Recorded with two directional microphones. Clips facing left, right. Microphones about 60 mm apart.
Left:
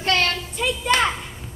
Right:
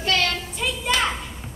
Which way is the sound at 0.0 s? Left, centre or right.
Left.